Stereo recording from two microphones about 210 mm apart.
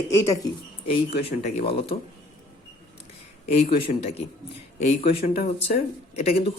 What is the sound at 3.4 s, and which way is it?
Speech, 30° left (ahead or behind).